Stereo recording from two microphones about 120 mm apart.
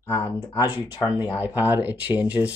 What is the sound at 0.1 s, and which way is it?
Speech, 30° left (ahead or behind).